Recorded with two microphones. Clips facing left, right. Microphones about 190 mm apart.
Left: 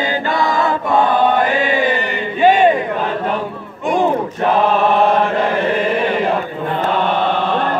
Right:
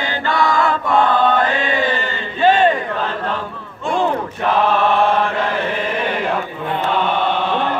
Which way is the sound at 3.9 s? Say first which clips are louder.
Left 3 dB; 15° left (ahead or behind).